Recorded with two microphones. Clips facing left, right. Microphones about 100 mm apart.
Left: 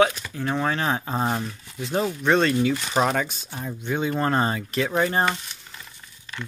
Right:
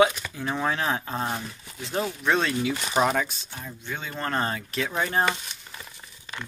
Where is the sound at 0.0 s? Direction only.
5° right (ahead or behind).